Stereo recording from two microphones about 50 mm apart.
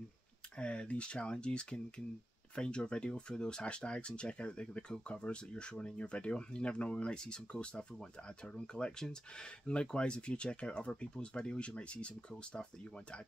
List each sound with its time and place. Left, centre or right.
0.6 s speech: left